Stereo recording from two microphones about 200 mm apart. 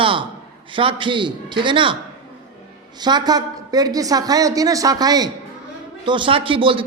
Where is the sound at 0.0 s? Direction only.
25° right (ahead or behind).